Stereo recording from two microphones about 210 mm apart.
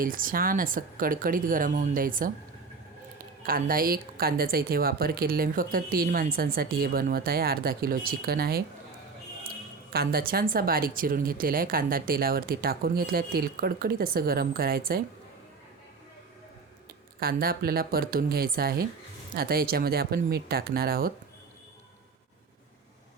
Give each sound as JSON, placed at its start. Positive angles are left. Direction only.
{"t": 0.0, "sound": "a woman's voice", "side_deg": -40}
{"t": 3.4, "sound": "speech", "side_deg": -45}
{"t": 9.9, "sound": "speech", "side_deg": -45}
{"t": 17.2, "sound": "speech", "side_deg": -45}